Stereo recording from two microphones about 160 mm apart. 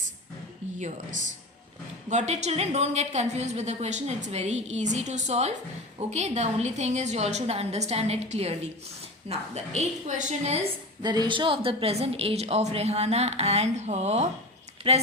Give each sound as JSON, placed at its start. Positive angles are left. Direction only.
{"t": 0.8, "sound": "a woman's voice", "side_deg": -50}
{"t": 11.0, "sound": "a woman's voice", "side_deg": -25}